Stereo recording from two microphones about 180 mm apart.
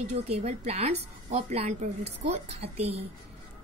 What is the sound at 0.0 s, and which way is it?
A woman's voice, 35° right (ahead or behind).